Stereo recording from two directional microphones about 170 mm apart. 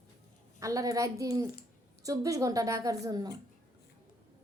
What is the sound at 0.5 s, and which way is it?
A woman's voice, 20° right (ahead or behind).